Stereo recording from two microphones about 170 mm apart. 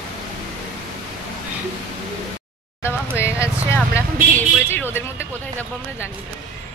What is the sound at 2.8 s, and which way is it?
Vehicle, 15° left (ahead or behind).